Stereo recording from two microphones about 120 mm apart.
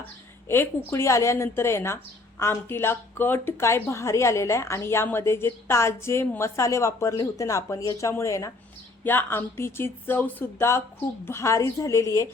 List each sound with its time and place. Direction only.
0.4 s speech: 20° left (ahead or behind)